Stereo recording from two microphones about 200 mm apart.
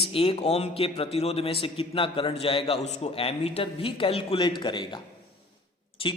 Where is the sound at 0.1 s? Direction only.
30° left (ahead or behind).